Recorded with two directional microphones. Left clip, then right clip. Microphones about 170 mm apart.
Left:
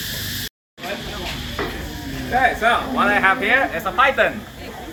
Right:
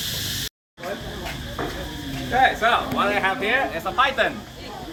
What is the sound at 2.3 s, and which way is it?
Speech, centre (ahead or behind).